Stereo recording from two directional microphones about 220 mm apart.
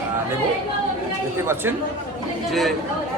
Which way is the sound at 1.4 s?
10° right (ahead or behind).